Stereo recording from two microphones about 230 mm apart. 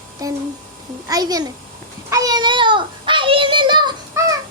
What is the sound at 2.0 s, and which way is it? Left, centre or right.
Child singing, centre.